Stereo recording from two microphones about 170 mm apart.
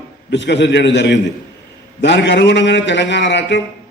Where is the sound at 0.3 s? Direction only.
90° left.